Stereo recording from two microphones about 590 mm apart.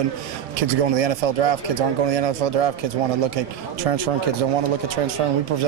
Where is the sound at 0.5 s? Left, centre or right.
Right.